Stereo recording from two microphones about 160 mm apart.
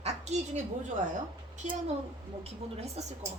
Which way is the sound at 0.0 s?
45° right (ahead or behind).